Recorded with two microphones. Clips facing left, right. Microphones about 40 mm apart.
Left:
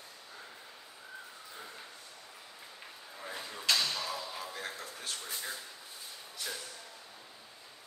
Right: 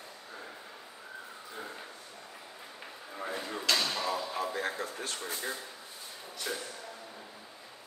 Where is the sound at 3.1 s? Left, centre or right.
Right.